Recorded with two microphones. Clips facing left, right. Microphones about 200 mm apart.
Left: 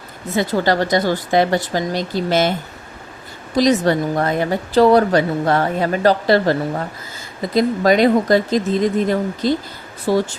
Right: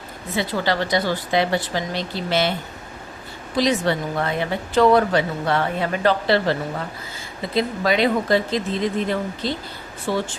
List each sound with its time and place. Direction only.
0.3 s speech: 45° left (ahead or behind)
3.5 s a woman's voice: 40° left (ahead or behind)